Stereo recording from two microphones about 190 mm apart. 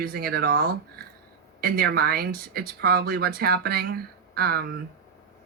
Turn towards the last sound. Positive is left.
turn(degrees=-55)  # may be behind; listen again after turning